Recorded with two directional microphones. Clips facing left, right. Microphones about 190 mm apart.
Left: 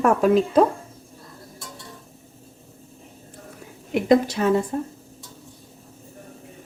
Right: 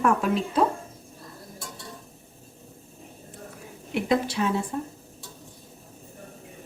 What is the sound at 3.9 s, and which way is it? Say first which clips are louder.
Speech: left 6 dB; 45° left (ahead or behind).